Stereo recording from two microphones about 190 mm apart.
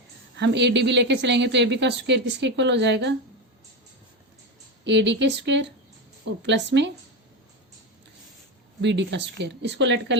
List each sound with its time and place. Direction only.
0.3 s a woman's voice: 65° right (ahead or behind)
4.8 s a woman's voice: 70° right (ahead or behind)
8.8 s a woman's voice: 65° right (ahead or behind)